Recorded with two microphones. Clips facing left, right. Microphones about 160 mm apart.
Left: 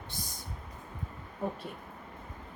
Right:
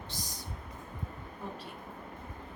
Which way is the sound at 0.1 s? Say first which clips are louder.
Left 1 dB; 55° left (ahead or behind).